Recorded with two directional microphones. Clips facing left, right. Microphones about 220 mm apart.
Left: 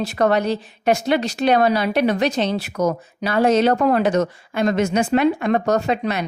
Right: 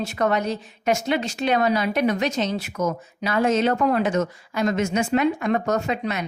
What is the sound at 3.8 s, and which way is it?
Speech, 75° left (ahead or behind).